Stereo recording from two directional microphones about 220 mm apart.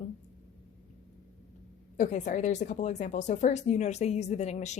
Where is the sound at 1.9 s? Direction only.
35° left (ahead or behind).